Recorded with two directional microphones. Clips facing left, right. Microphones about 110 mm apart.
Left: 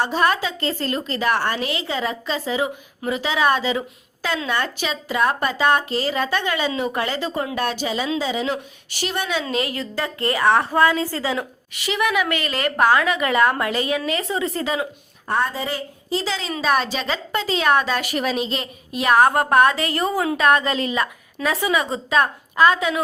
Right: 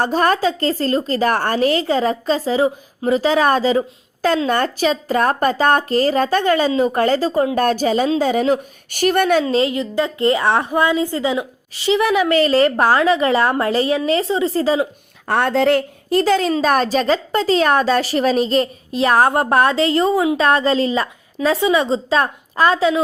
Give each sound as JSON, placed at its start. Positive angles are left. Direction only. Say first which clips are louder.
{"t": 0.0, "sound": "a woman's voice", "louder": "right 4 dB", "side_deg": -45}
{"t": 9.4, "sound": "a woman's voice", "louder": "right 7 dB", "side_deg": -30}
{"t": 11.7, "sound": "a woman's voice", "louder": "right 6 dB", "side_deg": -30}
{"t": 15.3, "sound": "a woman's voice", "louder": "right 8 dB", "side_deg": -75}